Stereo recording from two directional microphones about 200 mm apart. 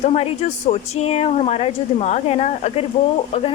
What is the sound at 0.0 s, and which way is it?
Speech, 35° left (ahead or behind).